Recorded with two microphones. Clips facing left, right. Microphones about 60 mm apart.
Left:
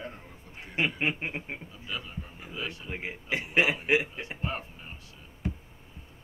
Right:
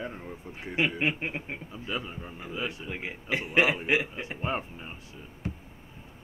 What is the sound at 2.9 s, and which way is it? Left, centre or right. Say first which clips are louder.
Speech: right 1 dB; centre.